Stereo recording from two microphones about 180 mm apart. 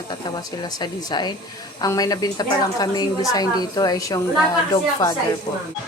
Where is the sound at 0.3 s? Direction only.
20° left (ahead or behind).